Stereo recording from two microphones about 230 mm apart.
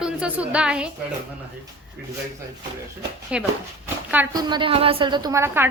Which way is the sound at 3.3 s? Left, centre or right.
Centre.